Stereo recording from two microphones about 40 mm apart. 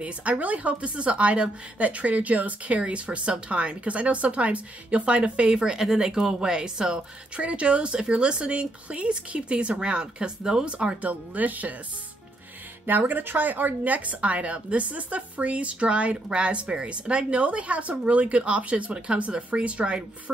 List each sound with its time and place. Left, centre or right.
0.0 s a woman's voice: right
2.8 s speech: right
11.0 s speech: right
12.8 s a woman's voice: right